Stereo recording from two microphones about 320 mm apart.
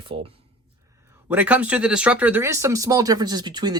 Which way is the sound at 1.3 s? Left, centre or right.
Centre.